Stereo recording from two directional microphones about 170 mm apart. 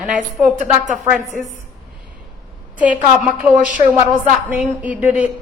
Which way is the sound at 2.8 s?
5° right (ahead or behind).